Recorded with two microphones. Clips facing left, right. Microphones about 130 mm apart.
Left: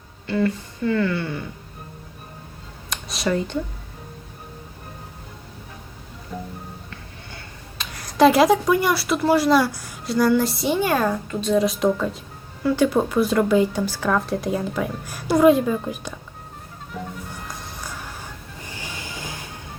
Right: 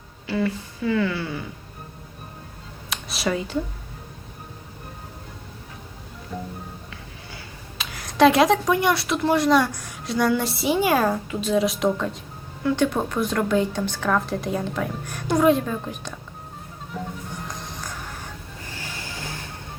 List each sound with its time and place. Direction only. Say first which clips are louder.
0.3 s speech: left 3 dB; 5° right (ahead or behind)
2.9 s a sound: even; centre (ahead or behind)
3.2 s speech: left 2 dB; 5° right (ahead or behind)
6.3 s speech: even; centre (ahead or behind)
7.8 s speech: left 1 dB; centre (ahead or behind)
16.9 s music: even; centre (ahead or behind)